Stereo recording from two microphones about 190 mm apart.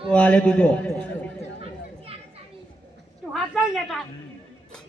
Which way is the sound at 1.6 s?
30° right (ahead or behind).